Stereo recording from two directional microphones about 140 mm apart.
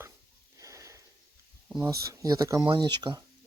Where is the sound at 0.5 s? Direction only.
20° right (ahead or behind).